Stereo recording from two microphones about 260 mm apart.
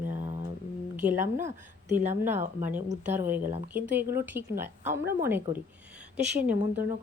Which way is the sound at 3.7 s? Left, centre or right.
Centre.